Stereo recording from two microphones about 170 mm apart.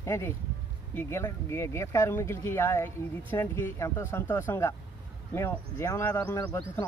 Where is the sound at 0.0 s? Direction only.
15° left (ahead or behind).